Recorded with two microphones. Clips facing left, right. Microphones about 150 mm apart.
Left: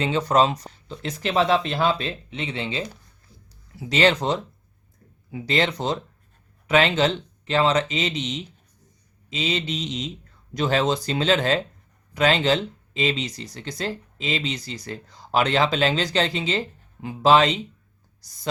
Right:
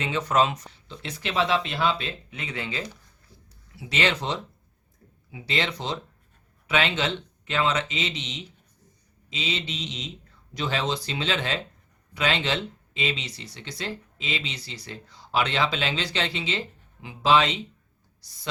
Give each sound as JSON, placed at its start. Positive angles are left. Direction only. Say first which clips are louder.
{"t": 0.0, "sound": "speech", "louder": "left 4 dB", "side_deg": 35}
{"t": 3.8, "sound": "speech", "louder": "left 6 dB", "side_deg": 40}